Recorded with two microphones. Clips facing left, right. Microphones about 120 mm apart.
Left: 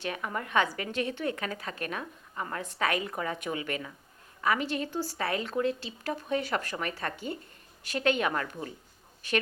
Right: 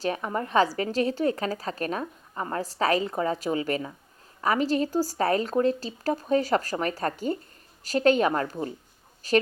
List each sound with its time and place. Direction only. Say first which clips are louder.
0.0 s a woman's voice: right 6 dB; 35° right (ahead or behind)